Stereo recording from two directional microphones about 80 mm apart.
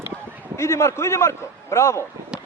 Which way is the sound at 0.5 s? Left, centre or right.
Left.